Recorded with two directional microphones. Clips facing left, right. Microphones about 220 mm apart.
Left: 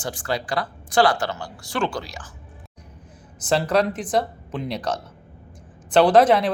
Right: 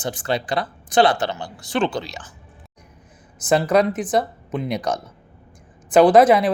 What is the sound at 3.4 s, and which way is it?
Speech, 10° right (ahead or behind).